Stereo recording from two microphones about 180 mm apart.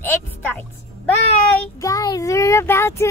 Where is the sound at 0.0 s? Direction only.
10° left (ahead or behind).